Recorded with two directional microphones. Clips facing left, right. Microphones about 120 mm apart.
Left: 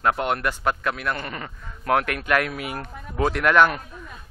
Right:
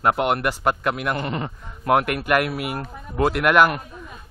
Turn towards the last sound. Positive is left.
turn(degrees=-10)  # may be behind; listen again after turning